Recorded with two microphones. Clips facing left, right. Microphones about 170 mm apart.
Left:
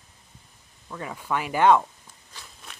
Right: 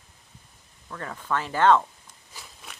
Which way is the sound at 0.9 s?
10° left (ahead or behind).